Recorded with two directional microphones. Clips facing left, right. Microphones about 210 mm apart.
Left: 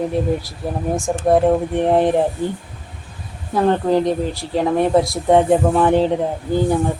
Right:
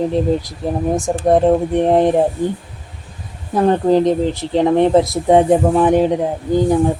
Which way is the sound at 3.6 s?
20° right (ahead or behind).